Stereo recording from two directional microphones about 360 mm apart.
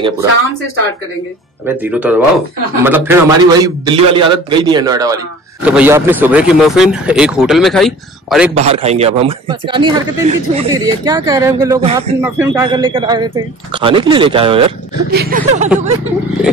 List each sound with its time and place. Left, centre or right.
1.7 s a man's voice: centre
8.5 s a man's voice: centre
15.0 s speech: right